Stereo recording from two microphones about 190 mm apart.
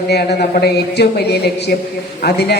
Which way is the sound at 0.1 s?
55° left (ahead or behind).